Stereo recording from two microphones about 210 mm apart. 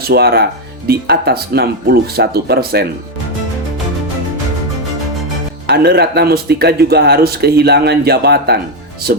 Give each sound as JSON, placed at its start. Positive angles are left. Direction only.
{"t": 0.0, "sound": "speech", "side_deg": -50}
{"t": 5.6, "sound": "speech", "side_deg": -50}